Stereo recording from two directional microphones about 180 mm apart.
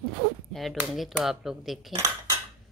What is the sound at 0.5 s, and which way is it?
Speech, centre (ahead or behind).